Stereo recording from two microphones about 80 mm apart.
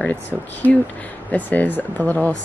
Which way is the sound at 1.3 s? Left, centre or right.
Left.